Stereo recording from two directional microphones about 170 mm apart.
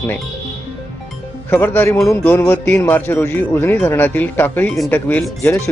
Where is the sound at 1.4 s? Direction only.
10° left (ahead or behind).